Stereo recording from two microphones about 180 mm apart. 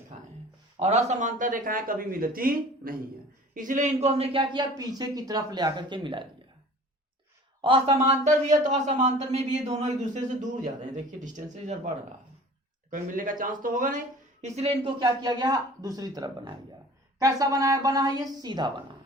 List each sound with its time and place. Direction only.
0.1 s a sound: 35° right (ahead or behind)
0.8 s speech: 40° right (ahead or behind)
7.6 s speech: 30° right (ahead or behind)
8.1 s speech: 40° right (ahead or behind)
12.9 s speech: 50° right (ahead or behind)
14.4 s speech: 35° right (ahead or behind)
14.9 s speech: 20° right (ahead or behind)